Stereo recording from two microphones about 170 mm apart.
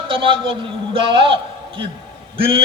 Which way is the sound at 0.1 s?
30° right (ahead or behind).